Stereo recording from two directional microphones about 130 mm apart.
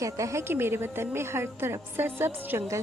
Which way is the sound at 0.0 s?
25° right (ahead or behind).